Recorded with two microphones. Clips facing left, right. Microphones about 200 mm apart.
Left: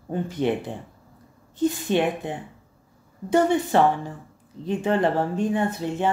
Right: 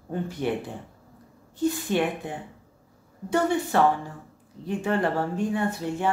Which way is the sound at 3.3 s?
20° left (ahead or behind).